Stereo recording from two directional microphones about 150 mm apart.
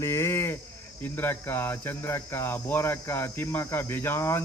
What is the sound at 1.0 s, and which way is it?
Cricket, 15° left (ahead or behind).